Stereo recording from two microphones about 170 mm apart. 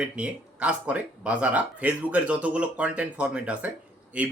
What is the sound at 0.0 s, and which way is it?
Speech, 5° right (ahead or behind).